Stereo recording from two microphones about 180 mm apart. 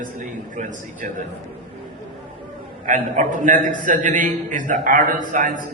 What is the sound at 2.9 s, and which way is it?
A man's voice, 45° right (ahead or behind).